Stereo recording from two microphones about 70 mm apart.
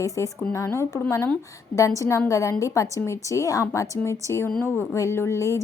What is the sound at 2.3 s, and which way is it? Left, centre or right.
Speech, left.